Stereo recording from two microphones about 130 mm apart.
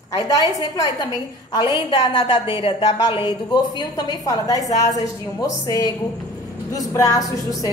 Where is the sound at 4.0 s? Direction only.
30° left (ahead or behind).